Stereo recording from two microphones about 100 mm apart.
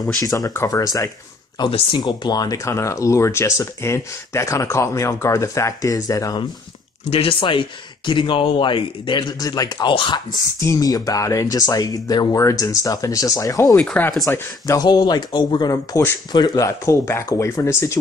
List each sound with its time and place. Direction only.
0.2 s speech: 35° left (ahead or behind)
7.1 s speech: 75° left (ahead or behind); by 9.2 s 55° left (ahead or behind)
9.4 s speech: 40° left (ahead or behind)
10.6 s speech: 35° left (ahead or behind)
13.7 s speech: 15° left (ahead or behind)
14.7 s speech: 40° left (ahead or behind)
16.6 s speech: 30° left (ahead or behind)